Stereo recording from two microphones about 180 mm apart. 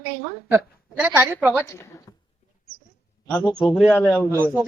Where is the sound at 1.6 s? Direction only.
15° left (ahead or behind).